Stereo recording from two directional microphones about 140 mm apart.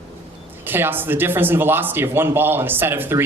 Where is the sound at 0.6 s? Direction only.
15° right (ahead or behind).